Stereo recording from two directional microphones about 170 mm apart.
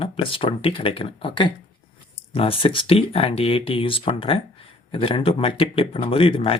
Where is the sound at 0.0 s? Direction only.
30° left (ahead or behind).